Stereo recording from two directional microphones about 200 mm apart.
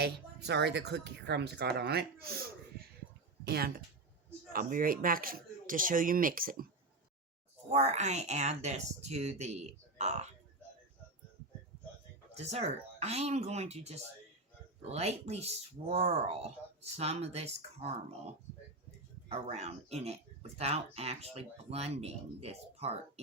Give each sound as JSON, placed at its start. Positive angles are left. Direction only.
{"t": 0.0, "sound": "speech", "side_deg": -60}
{"t": 3.4, "sound": "speech", "side_deg": -55}
{"t": 7.7, "sound": "speech", "side_deg": -35}
{"t": 12.4, "sound": "speech", "side_deg": -30}
{"t": 19.3, "sound": "speech", "side_deg": -30}